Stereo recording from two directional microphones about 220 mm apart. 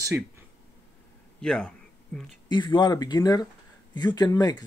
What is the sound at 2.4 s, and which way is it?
Speech, 20° left (ahead or behind).